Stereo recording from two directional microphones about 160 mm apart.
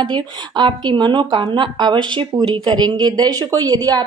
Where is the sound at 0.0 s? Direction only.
30° right (ahead or behind).